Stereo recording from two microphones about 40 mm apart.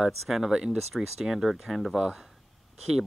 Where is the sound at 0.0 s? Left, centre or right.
Centre.